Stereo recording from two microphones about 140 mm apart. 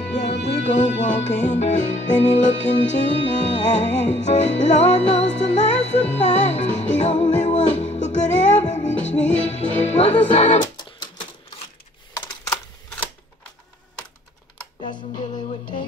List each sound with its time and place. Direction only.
0.2 s music: 50° left (ahead or behind)
10.6 s music: 30° left (ahead or behind)
14.8 s music: 35° left (ahead or behind)